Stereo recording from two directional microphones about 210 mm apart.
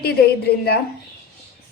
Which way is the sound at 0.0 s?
50° left (ahead or behind).